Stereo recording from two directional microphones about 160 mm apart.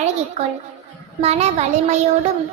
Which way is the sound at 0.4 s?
45° right (ahead or behind).